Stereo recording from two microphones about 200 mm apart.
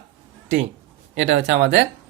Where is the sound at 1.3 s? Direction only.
60° right (ahead or behind).